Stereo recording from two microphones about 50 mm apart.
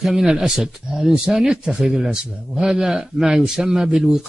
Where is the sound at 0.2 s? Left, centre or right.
Centre.